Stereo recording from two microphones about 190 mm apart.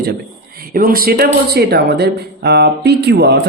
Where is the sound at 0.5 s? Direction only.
50° right (ahead or behind).